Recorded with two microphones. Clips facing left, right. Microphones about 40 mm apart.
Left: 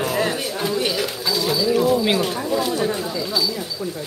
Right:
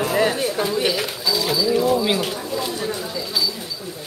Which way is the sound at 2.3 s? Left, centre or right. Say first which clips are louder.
Left 4 dB; left.